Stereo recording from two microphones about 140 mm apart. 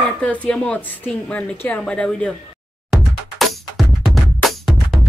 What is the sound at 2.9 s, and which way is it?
Music, centre (ahead or behind).